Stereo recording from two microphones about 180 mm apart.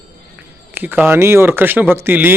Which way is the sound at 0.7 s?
10° right (ahead or behind).